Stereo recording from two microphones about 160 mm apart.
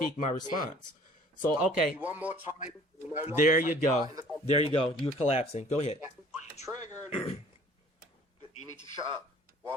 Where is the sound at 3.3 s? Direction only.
55° left (ahead or behind).